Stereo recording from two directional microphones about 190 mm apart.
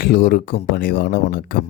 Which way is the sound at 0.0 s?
55° left (ahead or behind).